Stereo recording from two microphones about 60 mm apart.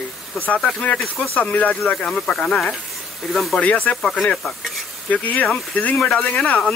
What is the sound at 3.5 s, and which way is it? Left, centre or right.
Speech, left.